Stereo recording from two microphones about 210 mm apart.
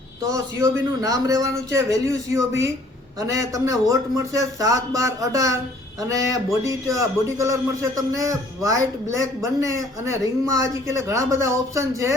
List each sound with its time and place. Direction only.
0.3 s a man's voice: 15° right (ahead or behind)